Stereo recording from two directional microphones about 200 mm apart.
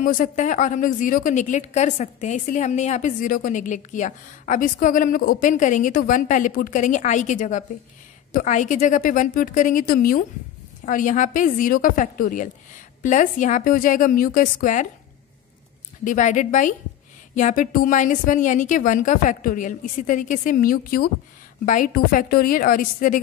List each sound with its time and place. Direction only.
0.0 s a woman's voice: 45° left (ahead or behind)
16.0 s a woman's voice: 40° left (ahead or behind)